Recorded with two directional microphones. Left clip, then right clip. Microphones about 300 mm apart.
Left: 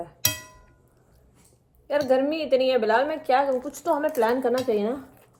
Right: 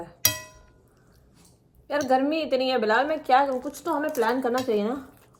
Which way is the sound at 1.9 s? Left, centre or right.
Centre.